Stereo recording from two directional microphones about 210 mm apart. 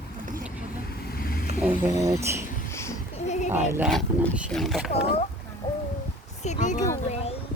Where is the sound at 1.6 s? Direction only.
5° right (ahead or behind).